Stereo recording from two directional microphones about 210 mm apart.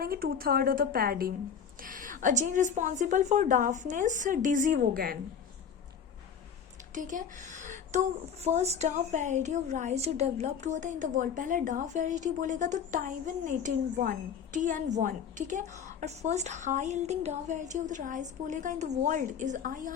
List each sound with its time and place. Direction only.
0.0 s a woman's voice: 45° right (ahead or behind)
6.9 s a woman's voice: 40° right (ahead or behind)